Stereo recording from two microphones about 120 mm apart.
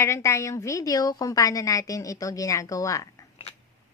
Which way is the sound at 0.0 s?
25° left (ahead or behind).